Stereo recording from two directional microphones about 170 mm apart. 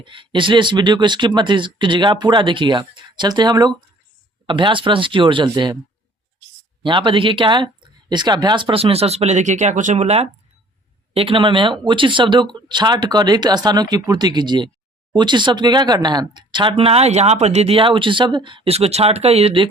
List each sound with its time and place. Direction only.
0.0 s speech: 30° right (ahead or behind)
6.8 s speech: 30° right (ahead or behind)